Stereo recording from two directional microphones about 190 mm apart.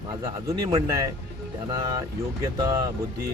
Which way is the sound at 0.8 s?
20° right (ahead or behind).